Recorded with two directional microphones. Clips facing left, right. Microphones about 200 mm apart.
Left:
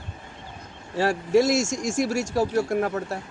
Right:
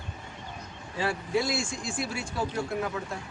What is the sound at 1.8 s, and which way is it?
Speech, 80° left.